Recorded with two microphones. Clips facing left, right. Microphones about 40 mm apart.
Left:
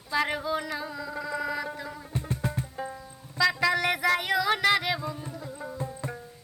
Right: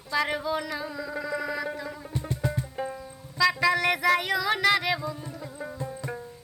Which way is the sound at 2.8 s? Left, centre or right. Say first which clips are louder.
Right 4 dB; right.